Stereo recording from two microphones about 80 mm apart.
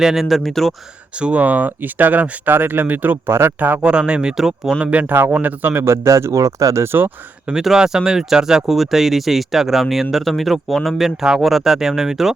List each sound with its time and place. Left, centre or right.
0.0 s speech: centre
1.1 s speech: centre
3.8 s speech: centre
4.9 s speech: right
6.8 s speech: right
7.4 s speech: centre